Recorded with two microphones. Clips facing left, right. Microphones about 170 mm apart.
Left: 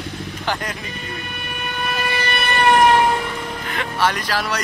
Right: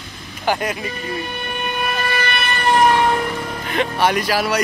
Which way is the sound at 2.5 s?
65° left (ahead or behind).